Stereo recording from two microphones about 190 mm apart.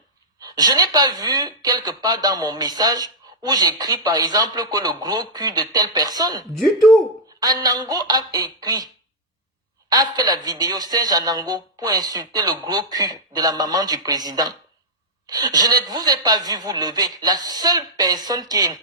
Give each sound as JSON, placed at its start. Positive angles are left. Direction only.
{"t": 0.3, "sound": "a woman's voice", "side_deg": -20}
{"t": 9.9, "sound": "a woman's voice", "side_deg": -20}